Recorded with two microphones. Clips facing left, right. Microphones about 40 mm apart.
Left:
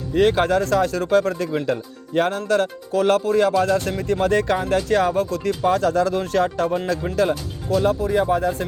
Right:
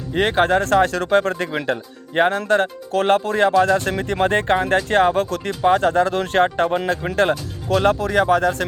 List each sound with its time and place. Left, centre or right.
0.1 s speech: right
1.1 s speech: right
1.7 s speech: right
2.9 s speech: right
3.9 s speech: right
4.2 s speech: right
7.7 s speech: right